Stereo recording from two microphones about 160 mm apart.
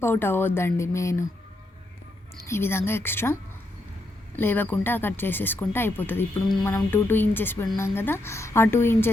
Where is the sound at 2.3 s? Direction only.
15° left (ahead or behind).